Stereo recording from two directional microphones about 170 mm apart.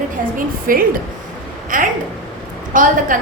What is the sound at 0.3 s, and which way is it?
A woman's voice, 55° right (ahead or behind).